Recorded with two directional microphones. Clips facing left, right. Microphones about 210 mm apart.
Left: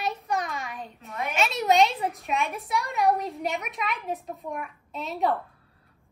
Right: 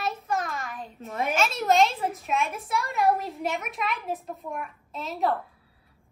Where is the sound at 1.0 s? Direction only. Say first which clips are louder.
Right 4 dB; 45° right (ahead or behind).